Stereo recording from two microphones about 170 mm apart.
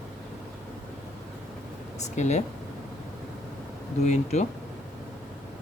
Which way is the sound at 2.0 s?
40° left (ahead or behind).